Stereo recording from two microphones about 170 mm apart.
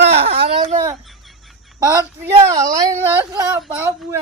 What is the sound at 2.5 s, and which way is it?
Speech, 20° right (ahead or behind).